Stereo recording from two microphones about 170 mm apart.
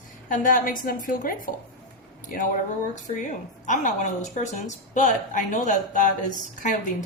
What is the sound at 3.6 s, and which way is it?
A woman's voice, 45° left (ahead or behind).